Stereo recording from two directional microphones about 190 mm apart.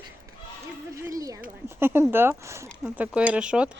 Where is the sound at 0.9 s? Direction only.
15° right (ahead or behind).